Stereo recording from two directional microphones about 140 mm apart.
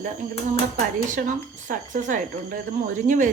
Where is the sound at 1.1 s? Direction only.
65° right (ahead or behind).